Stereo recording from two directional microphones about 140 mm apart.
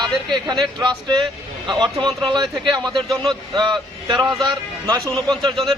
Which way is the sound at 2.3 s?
30° right (ahead or behind).